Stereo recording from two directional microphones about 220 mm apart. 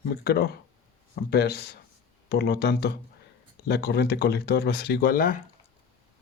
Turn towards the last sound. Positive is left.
turn(degrees=40)  # may be behind; listen again after turning